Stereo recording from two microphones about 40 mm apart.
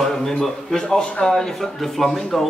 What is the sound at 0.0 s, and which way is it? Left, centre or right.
A man's voice, centre.